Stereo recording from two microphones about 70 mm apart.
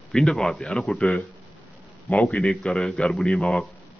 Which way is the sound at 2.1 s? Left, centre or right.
Left.